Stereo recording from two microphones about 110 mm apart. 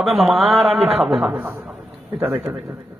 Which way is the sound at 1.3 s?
20° right (ahead or behind).